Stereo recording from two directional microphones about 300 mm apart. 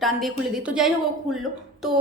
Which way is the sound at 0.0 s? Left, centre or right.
Centre.